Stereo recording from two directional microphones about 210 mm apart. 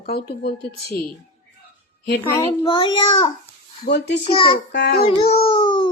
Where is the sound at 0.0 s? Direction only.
45° left (ahead or behind).